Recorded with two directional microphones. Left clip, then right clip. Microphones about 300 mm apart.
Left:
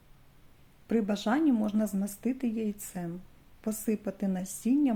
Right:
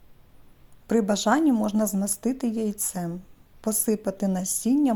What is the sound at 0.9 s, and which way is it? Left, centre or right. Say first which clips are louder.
A woman's voice: right 7 dB; centre.